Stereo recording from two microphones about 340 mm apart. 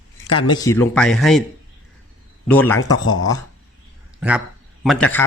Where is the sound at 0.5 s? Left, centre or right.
Centre.